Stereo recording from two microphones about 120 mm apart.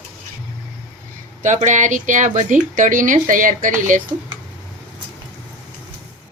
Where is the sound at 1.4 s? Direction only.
90° right.